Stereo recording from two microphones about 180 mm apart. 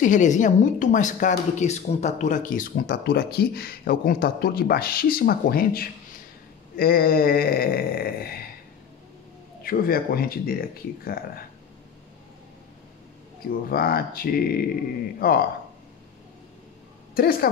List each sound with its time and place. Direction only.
0.0 s speech: 45° left (ahead or behind)
9.6 s speech: 55° left (ahead or behind)
13.7 s speech: 55° left (ahead or behind)
17.1 s a woman's voice: 55° left (ahead or behind)